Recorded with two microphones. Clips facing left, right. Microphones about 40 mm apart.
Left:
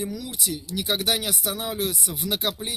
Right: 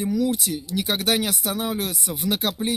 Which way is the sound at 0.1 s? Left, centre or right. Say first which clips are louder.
Right 8 dB; right.